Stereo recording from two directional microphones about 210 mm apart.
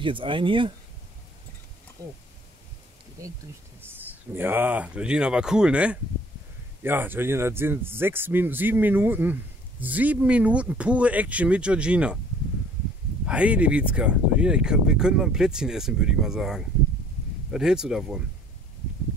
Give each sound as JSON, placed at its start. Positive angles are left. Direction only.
{"t": 0.0, "sound": "speech", "side_deg": -25}
{"t": 3.9, "sound": "speech", "side_deg": -10}
{"t": 13.2, "sound": "speech", "side_deg": -5}